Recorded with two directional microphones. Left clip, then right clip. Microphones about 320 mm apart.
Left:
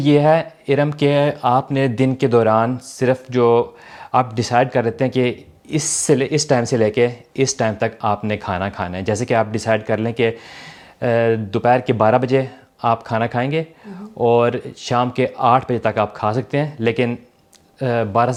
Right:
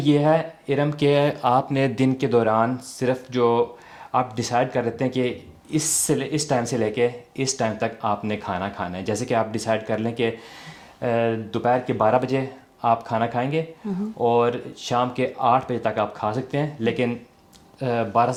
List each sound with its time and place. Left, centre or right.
0.0 s speech: left